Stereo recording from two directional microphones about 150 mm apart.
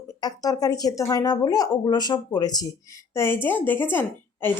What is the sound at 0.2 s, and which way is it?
Speech, 25° left (ahead or behind).